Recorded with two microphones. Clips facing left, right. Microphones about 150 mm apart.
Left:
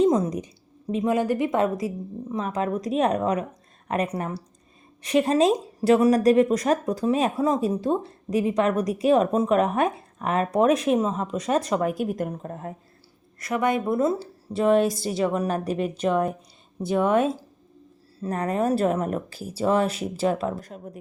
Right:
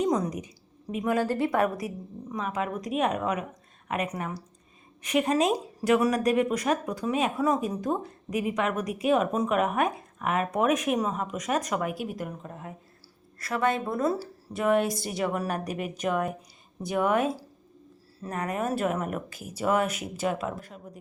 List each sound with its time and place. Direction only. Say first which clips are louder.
0.0 s a woman's voice: left 6 dB; 30° left (ahead or behind)
2.3 s speech: left 4 dB; 35° left (ahead or behind)
13.4 s speech: left 3 dB; 15° left (ahead or behind); by 20.9 s 40° left (ahead or behind)